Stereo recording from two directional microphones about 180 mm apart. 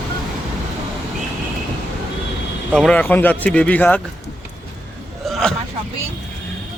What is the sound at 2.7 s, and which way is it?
Speech, 5° left (ahead or behind).